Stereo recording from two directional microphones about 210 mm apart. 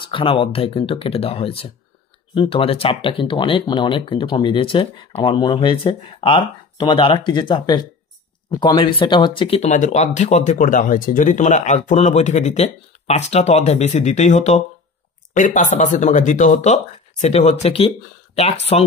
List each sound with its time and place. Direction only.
0.1 s speech: 25° left (ahead or behind)